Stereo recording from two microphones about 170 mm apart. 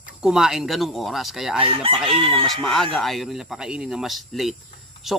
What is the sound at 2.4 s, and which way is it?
Speech, centre (ahead or behind).